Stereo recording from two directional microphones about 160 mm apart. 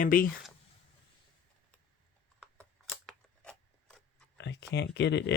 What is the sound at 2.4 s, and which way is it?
Scissors, 5° left (ahead or behind).